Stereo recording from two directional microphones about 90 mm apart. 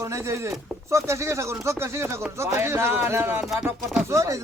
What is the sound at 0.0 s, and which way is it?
Speech, 35° right (ahead or behind).